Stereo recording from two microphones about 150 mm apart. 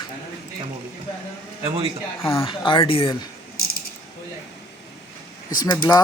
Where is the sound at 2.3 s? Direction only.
35° left (ahead or behind).